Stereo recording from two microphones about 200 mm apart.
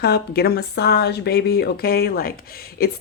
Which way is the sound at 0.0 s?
50° left (ahead or behind).